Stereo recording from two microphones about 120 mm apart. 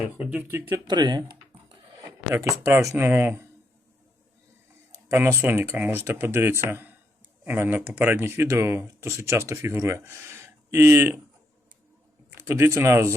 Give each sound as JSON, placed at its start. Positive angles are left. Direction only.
{"t": 0.2, "sound": "speech", "side_deg": -10}
{"t": 0.9, "sound": "speech", "side_deg": -35}
{"t": 2.3, "sound": "speech", "side_deg": -20}
{"t": 5.0, "sound": "speech", "side_deg": -20}
{"t": 12.3, "sound": "speech", "side_deg": -20}